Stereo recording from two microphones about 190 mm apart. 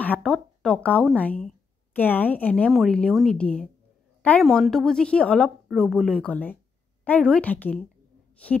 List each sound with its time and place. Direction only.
0.0 s a woman's voice: 5° left (ahead or behind)